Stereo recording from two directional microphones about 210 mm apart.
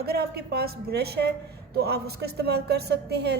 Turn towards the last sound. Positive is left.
turn(degrees=-50)  # may be behind; listen again after turning